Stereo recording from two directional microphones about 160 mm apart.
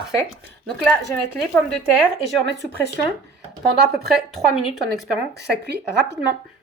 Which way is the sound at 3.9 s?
Centre (ahead or behind).